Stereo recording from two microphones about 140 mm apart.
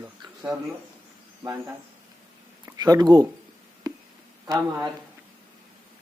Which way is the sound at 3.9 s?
30° right (ahead or behind).